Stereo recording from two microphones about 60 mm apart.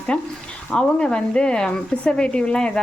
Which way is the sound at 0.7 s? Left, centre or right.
Centre.